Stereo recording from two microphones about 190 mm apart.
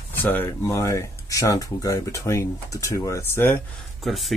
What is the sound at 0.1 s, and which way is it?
Speech, 10° left (ahead or behind).